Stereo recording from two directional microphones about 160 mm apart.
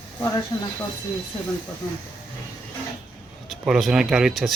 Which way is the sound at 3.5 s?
Centre (ahead or behind).